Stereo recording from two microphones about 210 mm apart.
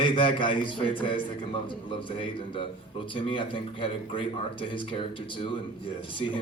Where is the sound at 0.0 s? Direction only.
25° left (ahead or behind).